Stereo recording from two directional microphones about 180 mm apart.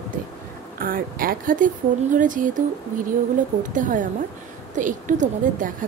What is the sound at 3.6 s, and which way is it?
Speech, 45° right (ahead or behind).